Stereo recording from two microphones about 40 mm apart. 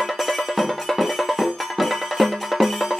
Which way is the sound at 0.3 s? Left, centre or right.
Centre.